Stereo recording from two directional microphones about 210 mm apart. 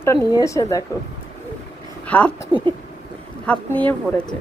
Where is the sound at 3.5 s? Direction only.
5° left (ahead or behind).